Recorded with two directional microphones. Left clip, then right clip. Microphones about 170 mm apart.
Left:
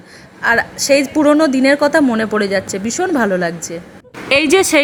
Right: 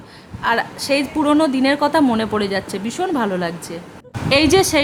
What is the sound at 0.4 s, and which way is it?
A woman's voice, 15° left (ahead or behind).